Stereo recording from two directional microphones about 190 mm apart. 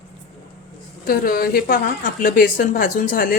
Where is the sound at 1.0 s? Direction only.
50° left (ahead or behind).